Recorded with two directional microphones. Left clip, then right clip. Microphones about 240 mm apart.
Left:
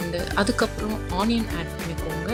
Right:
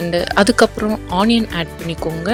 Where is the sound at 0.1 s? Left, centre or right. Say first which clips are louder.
Right 11 dB; right.